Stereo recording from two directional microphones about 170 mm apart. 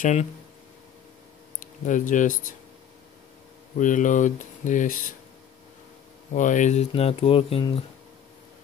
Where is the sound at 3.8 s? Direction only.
50° left (ahead or behind).